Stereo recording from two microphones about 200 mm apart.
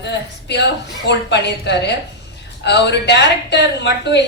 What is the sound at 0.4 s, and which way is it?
A woman's voice, 60° left (ahead or behind).